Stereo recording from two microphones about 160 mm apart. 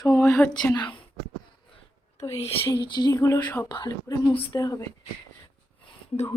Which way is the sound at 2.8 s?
30° left (ahead or behind).